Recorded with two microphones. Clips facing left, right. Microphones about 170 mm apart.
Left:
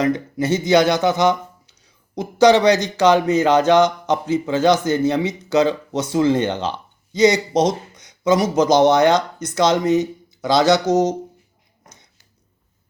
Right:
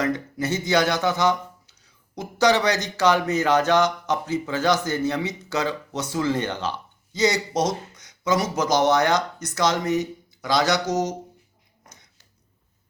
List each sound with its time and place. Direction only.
0.0 s speech: 20° left (ahead or behind)